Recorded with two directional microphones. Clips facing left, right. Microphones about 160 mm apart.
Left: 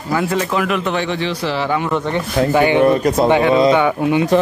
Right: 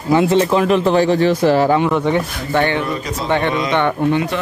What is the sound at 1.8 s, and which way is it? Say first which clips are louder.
Speech: right 3 dB; 10° right (ahead or behind).